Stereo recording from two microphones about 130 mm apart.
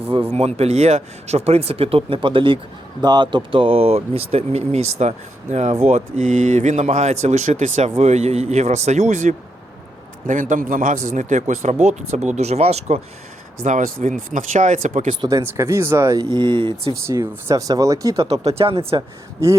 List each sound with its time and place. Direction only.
0.1 s speech: 45° right (ahead or behind)
6.1 s speech: 75° right (ahead or behind)
10.2 s a man's voice: 85° right
11.1 s speech: 70° right (ahead or behind); by 13.0 s 55° right (ahead or behind)
13.6 s speech: 85° right
15.2 s speech: 30° right (ahead or behind)
16.3 s speech: 40° right (ahead or behind)
17.1 s speech: 25° right (ahead or behind)
18.2 s speech: 50° right (ahead or behind)